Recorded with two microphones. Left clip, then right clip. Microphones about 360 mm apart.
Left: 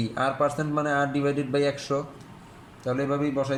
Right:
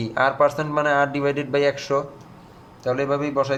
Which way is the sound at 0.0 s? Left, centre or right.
Right.